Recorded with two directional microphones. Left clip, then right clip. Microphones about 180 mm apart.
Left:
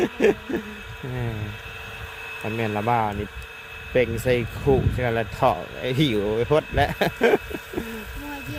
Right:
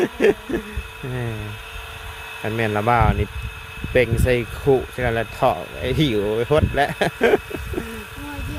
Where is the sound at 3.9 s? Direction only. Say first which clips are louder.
Right 3 dB; 10° right (ahead or behind).